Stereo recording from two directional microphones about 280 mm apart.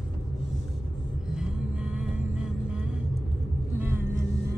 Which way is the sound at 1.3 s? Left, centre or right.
Centre.